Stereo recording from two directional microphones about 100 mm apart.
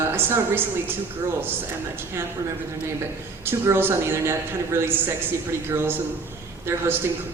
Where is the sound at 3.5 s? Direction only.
25° right (ahead or behind).